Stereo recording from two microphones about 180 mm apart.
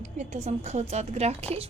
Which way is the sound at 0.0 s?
40° right (ahead or behind).